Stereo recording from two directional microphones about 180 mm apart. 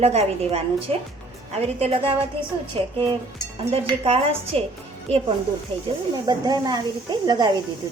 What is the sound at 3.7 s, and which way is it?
Speech, 35° right (ahead or behind).